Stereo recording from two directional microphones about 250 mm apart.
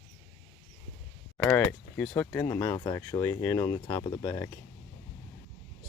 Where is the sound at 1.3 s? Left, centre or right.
Centre.